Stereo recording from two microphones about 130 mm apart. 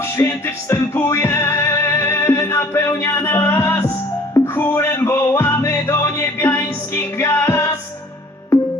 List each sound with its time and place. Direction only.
0.0 s music: 20° left (ahead or behind)